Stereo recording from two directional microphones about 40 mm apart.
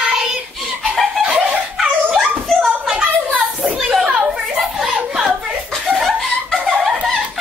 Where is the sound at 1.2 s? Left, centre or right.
Right.